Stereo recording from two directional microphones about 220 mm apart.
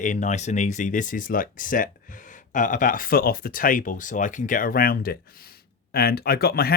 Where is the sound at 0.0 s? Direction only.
35° left (ahead or behind).